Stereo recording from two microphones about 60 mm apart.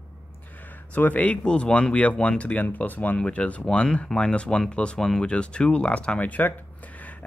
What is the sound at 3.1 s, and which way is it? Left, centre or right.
Speech, centre.